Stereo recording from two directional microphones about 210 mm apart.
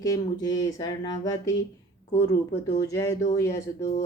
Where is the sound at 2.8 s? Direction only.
15° left (ahead or behind).